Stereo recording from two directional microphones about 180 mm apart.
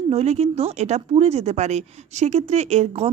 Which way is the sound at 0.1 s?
35° right (ahead or behind).